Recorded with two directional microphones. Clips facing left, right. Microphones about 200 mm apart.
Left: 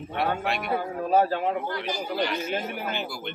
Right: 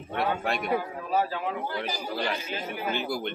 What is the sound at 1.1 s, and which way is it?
Speech, 50° left (ahead or behind).